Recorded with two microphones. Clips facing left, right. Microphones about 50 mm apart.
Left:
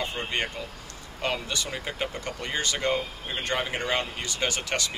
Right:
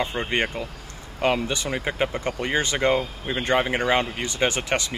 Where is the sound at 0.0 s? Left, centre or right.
Right.